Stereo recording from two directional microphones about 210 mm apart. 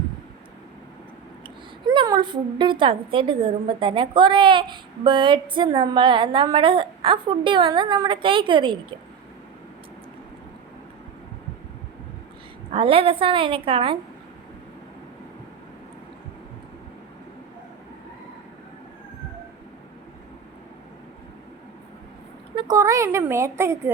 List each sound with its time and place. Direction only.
1.9 s a woman's voice: 20° right (ahead or behind)
12.7 s a woman's voice: 25° right (ahead or behind)
22.5 s a woman's voice: 20° right (ahead or behind)